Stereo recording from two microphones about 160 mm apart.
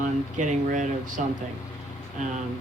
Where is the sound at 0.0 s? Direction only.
50° right (ahead or behind).